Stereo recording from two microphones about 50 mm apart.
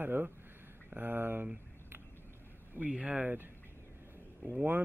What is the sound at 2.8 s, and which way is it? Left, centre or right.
Speech, right.